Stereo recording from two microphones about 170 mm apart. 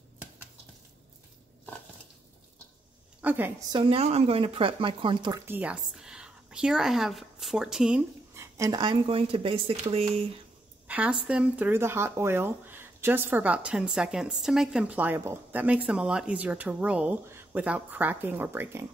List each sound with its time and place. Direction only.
3.2 s a woman's voice: 10° right (ahead or behind)
3.7 s speech: 35° right (ahead or behind)
5.5 s a woman's voice: 10° right (ahead or behind)
8.4 s speech: 20° right (ahead or behind)
10.9 s a sound: 10° right (ahead or behind)
11.2 s speech: 5° right (ahead or behind)